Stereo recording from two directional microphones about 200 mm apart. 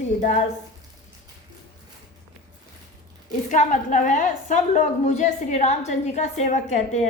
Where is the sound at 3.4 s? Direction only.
40° left (ahead or behind).